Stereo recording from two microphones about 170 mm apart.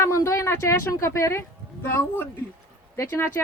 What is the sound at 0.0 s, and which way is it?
Speech, 15° left (ahead or behind).